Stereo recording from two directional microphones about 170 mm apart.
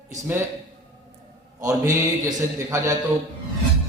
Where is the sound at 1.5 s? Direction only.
20° right (ahead or behind).